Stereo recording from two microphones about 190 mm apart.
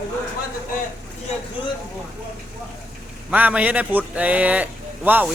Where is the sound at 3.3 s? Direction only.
5° right (ahead or behind).